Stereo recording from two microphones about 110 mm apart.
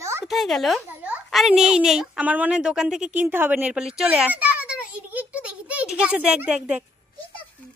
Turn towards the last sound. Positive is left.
turn(degrees=-10)  # may be behind; listen again after turning